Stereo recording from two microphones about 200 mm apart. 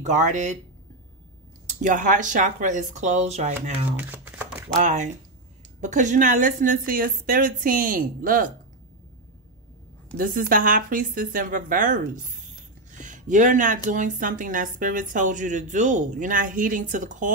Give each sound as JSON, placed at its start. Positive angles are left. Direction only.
{"t": 0.0, "sound": "a woman's voice", "side_deg": -35}
{"t": 1.8, "sound": "a woman's voice", "side_deg": -40}
{"t": 4.1, "sound": "a sound", "side_deg": -10}
{"t": 4.7, "sound": "a woman's voice", "side_deg": -35}
{"t": 10.1, "sound": "a woman's voice", "side_deg": -45}